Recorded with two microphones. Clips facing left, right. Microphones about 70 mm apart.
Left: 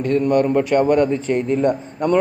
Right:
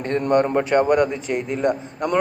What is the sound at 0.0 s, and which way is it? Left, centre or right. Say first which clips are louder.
Speech: left 2 dB; right.